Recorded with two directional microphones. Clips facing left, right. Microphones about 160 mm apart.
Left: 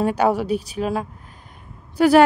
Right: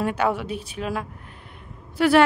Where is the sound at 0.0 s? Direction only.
40° left (ahead or behind).